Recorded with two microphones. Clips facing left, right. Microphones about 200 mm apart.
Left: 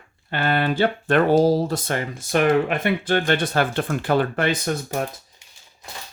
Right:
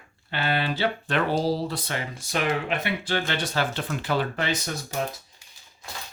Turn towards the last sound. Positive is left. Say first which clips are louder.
# left 6 dB
turn(degrees=55)  # may be behind; listen again after turning